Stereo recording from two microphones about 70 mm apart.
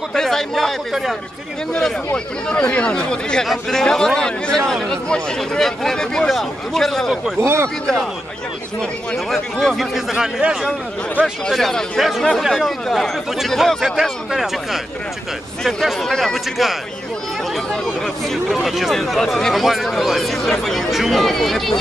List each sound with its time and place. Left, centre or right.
0.1 s a man's voice: centre
7.3 s speech: right
9.1 s a man's voice: centre
10.1 s speech: centre
11.4 s a man's voice: centre
18.5 s a man's voice: centre